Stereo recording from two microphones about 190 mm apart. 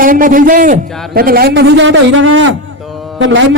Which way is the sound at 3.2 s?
80° right.